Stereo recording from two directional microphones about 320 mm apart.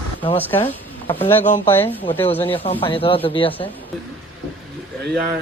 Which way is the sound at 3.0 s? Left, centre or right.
Centre.